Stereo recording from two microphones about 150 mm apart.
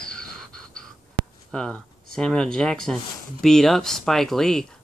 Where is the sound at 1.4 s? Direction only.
5° left (ahead or behind).